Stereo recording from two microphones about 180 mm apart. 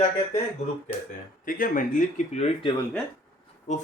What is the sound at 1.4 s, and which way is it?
Speech, 50° left (ahead or behind).